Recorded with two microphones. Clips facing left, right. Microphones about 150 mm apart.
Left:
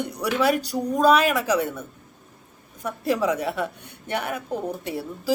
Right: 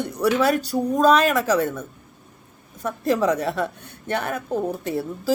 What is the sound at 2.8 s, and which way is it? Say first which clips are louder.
Speech: right 3 dB; 10° left (ahead or behind).